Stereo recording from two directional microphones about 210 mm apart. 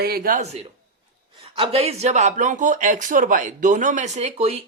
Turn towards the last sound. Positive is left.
turn(degrees=-30)  # may be behind; listen again after turning